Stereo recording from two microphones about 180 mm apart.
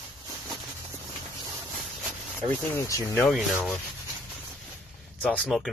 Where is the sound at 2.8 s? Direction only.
15° left (ahead or behind).